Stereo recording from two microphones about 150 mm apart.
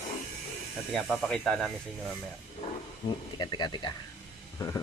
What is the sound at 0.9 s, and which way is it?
Speech, centre (ahead or behind).